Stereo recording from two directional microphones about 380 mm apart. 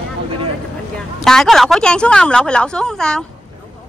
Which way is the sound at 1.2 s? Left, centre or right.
Centre.